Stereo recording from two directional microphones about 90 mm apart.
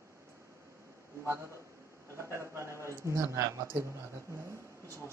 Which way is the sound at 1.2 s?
30° right (ahead or behind).